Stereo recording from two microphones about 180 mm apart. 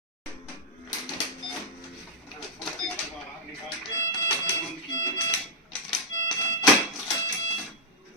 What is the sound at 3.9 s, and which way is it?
Music, 15° left (ahead or behind).